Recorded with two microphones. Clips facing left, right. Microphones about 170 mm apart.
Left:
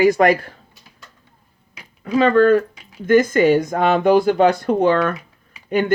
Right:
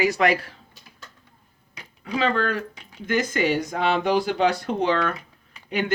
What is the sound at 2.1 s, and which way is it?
Speech, 50° left (ahead or behind).